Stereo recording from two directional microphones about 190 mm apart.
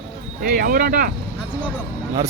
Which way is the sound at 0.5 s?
50° right (ahead or behind).